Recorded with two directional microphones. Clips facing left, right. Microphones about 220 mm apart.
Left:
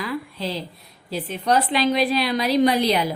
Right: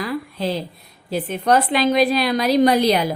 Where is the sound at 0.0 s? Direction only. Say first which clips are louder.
Right 4 dB; 50° right (ahead or behind).